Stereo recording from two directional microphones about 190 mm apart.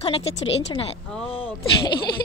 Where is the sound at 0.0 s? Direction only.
30° left (ahead or behind).